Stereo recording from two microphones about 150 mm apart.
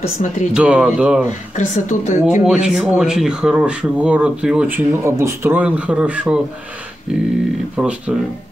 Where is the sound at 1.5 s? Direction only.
55° left (ahead or behind).